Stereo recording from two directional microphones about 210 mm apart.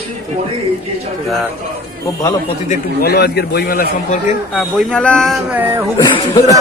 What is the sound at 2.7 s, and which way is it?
A man's voice, 50° left (ahead or behind).